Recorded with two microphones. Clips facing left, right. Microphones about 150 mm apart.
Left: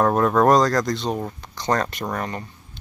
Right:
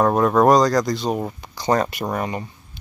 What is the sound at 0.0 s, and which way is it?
Speech, centre (ahead or behind).